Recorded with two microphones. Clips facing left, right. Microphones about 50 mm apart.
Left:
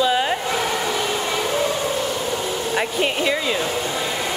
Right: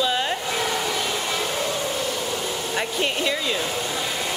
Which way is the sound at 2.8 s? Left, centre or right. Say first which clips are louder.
Left 3 dB; centre.